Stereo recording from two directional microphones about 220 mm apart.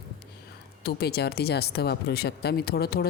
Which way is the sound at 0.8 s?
45° left (ahead or behind).